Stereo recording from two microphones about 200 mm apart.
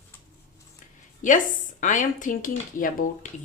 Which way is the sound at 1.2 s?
40° left (ahead or behind).